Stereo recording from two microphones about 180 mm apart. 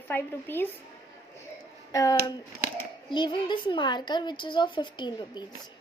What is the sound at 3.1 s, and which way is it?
A woman's voice, 25° left (ahead or behind).